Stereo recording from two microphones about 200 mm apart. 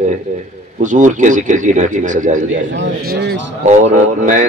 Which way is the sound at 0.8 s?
40° right (ahead or behind).